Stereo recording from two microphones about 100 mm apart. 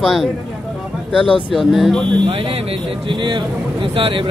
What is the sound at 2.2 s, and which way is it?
Speech, 75° right (ahead or behind).